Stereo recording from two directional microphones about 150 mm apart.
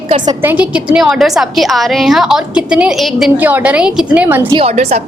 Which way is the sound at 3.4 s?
10° right (ahead or behind).